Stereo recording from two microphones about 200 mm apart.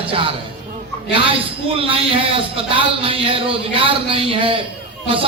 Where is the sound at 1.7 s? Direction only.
25° right (ahead or behind).